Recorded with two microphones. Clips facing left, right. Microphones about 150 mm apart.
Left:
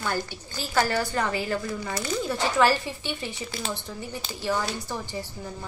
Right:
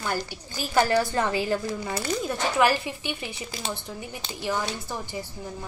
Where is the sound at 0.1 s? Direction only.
15° right (ahead or behind).